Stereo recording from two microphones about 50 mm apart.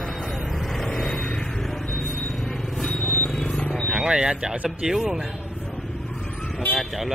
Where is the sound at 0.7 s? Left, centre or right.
Centre.